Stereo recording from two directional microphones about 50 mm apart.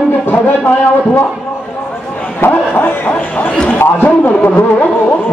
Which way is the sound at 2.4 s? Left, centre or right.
Left.